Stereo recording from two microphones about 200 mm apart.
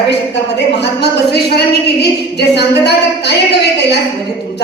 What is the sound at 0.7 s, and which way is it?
A woman's voice, 55° left (ahead or behind).